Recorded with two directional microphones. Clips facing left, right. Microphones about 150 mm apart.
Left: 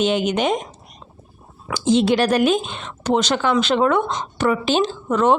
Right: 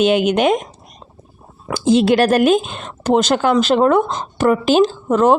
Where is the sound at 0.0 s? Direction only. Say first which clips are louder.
Right 5 dB; 55° right (ahead or behind).